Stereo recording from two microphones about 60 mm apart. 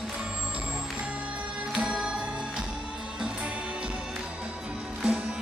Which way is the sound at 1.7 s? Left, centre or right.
Centre.